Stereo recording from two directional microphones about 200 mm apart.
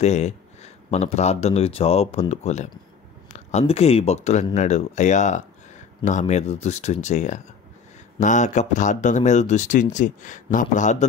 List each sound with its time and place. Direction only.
0.0 s speech: 35° left (ahead or behind)